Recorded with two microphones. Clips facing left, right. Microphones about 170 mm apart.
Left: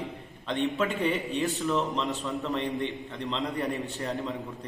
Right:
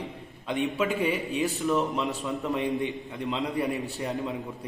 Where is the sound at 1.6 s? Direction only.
15° right (ahead or behind).